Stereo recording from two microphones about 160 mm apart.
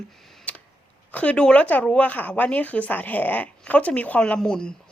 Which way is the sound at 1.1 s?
10° left (ahead or behind).